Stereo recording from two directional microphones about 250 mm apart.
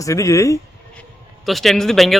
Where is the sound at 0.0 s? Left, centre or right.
Centre.